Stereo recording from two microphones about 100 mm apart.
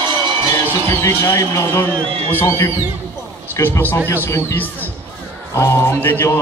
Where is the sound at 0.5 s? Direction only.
30° left (ahead or behind).